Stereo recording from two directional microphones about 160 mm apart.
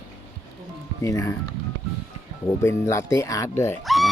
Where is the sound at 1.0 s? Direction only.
20° left (ahead or behind).